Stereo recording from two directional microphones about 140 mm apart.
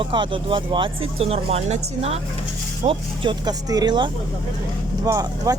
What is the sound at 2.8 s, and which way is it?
Speech, 35° right (ahead or behind).